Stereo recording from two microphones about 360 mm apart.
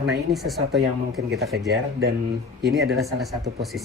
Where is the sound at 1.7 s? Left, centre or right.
Right.